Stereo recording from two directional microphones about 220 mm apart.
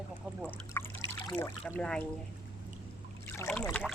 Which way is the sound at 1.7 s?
5° left (ahead or behind).